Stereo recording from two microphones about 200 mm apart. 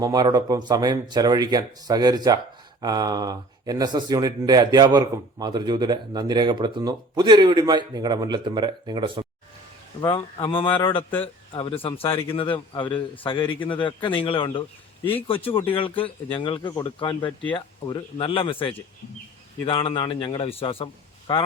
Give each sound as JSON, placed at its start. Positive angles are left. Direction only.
{"t": 0.0, "sound": "speech", "side_deg": -20}
{"t": 10.0, "sound": "speech", "side_deg": 25}